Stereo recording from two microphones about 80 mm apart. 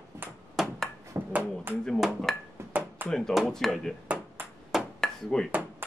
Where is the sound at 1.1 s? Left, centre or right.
Right.